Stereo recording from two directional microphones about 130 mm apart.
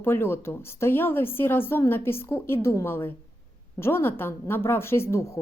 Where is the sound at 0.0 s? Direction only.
15° left (ahead or behind).